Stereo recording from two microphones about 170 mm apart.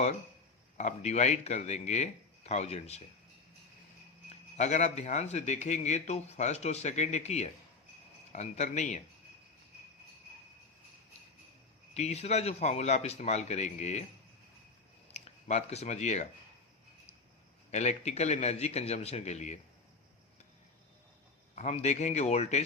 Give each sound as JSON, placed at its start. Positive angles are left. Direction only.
{"t": 0.8, "sound": "speech", "side_deg": 40}
{"t": 4.3, "sound": "speech", "side_deg": 40}
{"t": 11.9, "sound": "speech", "side_deg": 40}
{"t": 15.1, "sound": "speech", "side_deg": 40}
{"t": 17.7, "sound": "speech", "side_deg": 40}
{"t": 21.5, "sound": "speech", "side_deg": 40}